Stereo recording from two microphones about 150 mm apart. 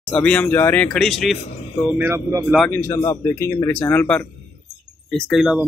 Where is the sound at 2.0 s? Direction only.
20° right (ahead or behind).